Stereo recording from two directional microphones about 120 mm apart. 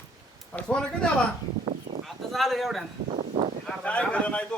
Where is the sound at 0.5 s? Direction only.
5° left (ahead or behind).